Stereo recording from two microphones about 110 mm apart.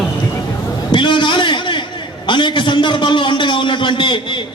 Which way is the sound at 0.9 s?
45° left (ahead or behind).